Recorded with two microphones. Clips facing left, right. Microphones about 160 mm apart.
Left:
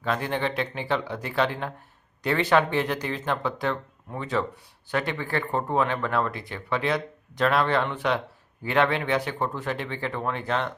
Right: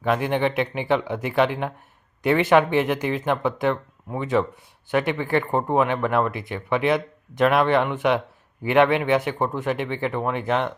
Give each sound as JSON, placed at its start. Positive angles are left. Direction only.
{"t": 0.0, "sound": "speech", "side_deg": -15}